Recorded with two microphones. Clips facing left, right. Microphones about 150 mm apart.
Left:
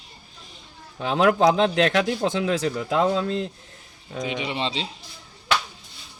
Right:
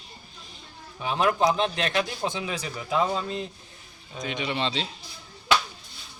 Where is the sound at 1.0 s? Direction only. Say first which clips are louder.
Left 5 dB; 90° left.